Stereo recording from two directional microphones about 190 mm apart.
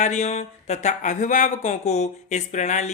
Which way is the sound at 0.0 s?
40° left (ahead or behind).